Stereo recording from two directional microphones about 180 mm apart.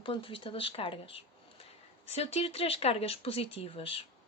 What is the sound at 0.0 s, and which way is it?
Speech, 30° left (ahead or behind).